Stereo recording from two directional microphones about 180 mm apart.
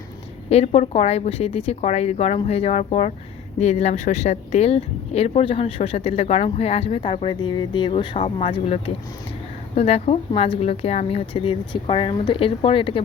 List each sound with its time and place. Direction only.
0.5 s speech: 40° left (ahead or behind)